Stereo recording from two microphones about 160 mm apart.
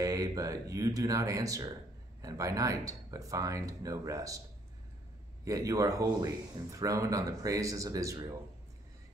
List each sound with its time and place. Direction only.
0.0 s a man's voice: 20° right (ahead or behind)
5.4 s a man's voice: 20° right (ahead or behind)